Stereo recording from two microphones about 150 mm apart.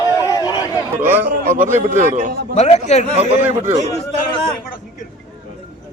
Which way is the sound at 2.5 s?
45° left (ahead or behind).